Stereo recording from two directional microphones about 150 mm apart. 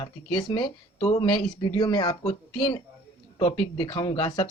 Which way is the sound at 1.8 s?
25° left (ahead or behind).